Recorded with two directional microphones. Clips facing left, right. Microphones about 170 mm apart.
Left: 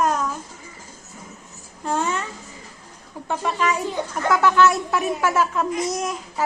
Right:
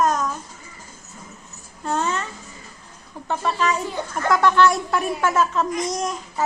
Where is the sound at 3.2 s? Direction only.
10° left (ahead or behind).